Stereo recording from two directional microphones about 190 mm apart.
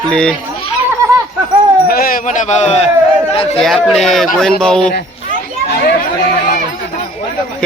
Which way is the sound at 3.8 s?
Centre (ahead or behind).